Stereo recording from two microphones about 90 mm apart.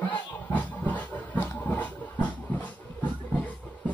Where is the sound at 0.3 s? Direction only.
20° left (ahead or behind).